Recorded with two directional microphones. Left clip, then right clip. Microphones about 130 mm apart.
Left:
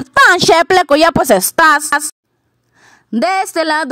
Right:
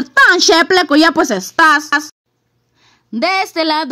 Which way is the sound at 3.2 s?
40° left (ahead or behind).